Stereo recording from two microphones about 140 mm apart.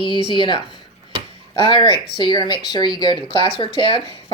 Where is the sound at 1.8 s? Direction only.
30° left (ahead or behind).